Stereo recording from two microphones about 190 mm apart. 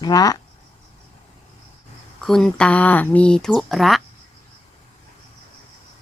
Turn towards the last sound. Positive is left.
turn(degrees=0)  # may be behind; listen again after turning